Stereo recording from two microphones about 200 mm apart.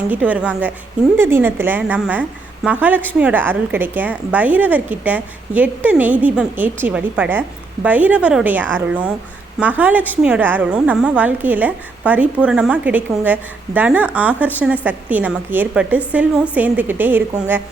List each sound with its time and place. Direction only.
0.1 s a woman's voice: 5° right (ahead or behind)